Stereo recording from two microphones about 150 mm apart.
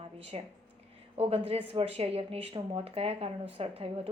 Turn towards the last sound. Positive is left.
turn(degrees=-40)  # may be behind; listen again after turning